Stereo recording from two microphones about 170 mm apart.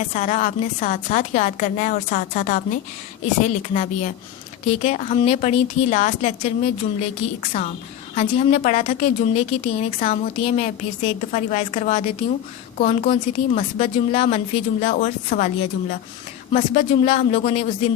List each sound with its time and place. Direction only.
0.0 s a woman's voice: 45° left (ahead or behind)
3.4 s a woman's voice: 40° left (ahead or behind)